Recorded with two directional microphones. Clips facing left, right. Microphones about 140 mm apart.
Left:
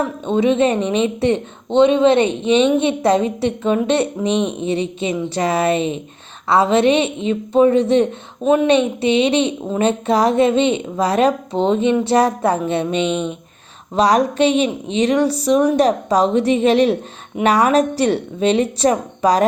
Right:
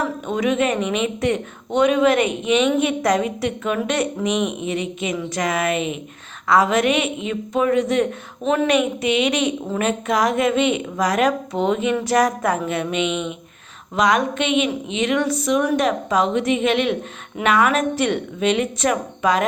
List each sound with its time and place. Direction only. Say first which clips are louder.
0.0 s a woman's voice: left 5 dB; 30° left (ahead or behind)